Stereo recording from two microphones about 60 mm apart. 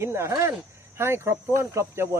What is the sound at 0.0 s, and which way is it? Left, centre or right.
Speech, right.